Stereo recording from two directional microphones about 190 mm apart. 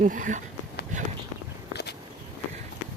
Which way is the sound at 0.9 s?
40° right (ahead or behind).